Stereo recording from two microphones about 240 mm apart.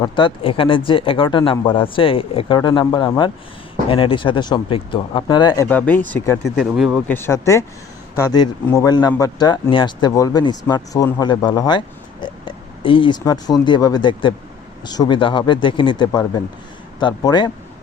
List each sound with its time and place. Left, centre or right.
0.0 s speech: left
6.6 s speech: centre
7.1 s speech: centre